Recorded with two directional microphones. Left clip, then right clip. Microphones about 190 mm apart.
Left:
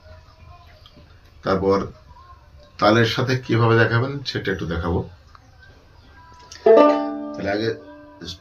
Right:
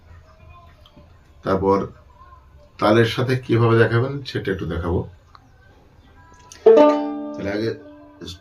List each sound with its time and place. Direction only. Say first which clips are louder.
1.4 s speech: right 1 dB; 10° right (ahead or behind)
6.3 s music: right 1 dB; 15° right (ahead or behind)
7.3 s speech: left 2 dB; 10° right (ahead or behind)